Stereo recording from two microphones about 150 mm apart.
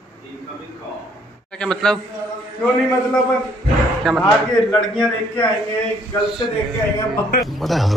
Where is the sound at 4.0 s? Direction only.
Centre (ahead or behind).